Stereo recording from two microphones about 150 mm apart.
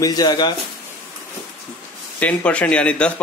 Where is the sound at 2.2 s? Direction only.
10° left (ahead or behind).